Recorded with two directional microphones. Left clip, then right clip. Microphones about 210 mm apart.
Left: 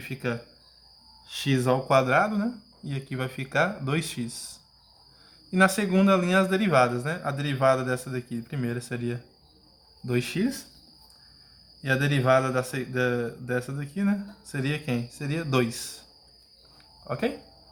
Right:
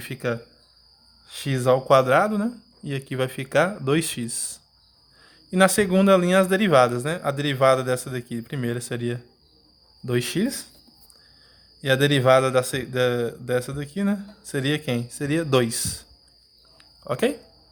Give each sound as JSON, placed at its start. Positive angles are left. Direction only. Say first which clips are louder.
{"t": 0.0, "sound": "a man's voice", "louder": "right 4 dB", "side_deg": -40}
{"t": 11.8, "sound": "a man's voice", "louder": "right 6 dB", "side_deg": -40}
{"t": 17.0, "sound": "speech", "louder": "right 6 dB", "side_deg": -40}